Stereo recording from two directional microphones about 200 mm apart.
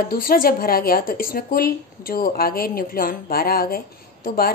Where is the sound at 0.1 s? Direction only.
45° left (ahead or behind).